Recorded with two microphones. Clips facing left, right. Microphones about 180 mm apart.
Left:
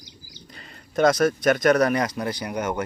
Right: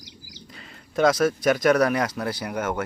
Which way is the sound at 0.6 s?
Centre (ahead or behind).